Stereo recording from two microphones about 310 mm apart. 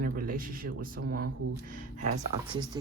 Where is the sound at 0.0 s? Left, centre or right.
Right.